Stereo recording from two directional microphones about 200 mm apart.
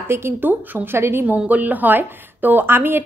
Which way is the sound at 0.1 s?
10° right (ahead or behind).